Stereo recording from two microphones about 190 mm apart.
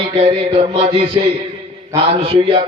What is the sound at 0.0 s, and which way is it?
A man's voice, 30° right (ahead or behind).